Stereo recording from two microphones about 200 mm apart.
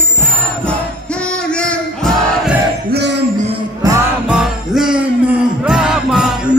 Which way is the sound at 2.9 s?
60° right (ahead or behind).